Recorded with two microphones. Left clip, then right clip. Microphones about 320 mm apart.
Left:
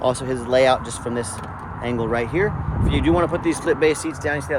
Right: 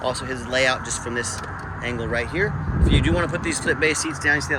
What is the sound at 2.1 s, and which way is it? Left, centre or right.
Speech, centre.